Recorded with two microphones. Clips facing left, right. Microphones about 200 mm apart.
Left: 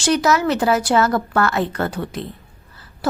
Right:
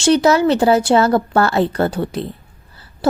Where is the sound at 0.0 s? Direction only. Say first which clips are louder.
Right 5 dB; 30° right (ahead or behind).